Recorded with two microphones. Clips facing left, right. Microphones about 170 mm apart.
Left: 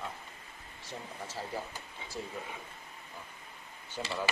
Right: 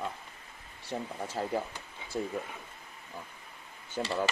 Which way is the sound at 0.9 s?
65° right (ahead or behind).